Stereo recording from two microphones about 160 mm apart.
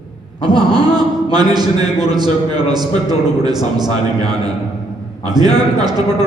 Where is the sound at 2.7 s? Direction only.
25° right (ahead or behind).